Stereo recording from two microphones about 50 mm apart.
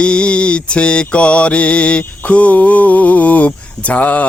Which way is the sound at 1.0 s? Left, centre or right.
Left.